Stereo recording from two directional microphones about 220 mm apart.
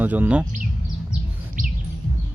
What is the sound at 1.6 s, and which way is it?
Bird, 40° right (ahead or behind).